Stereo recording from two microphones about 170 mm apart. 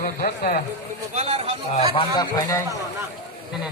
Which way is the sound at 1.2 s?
35° right (ahead or behind).